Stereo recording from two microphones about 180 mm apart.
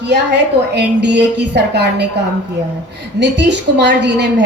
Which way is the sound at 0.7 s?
75° right (ahead or behind).